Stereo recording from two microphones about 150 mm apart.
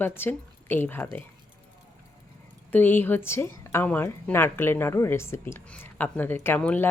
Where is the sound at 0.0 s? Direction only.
15° left (ahead or behind).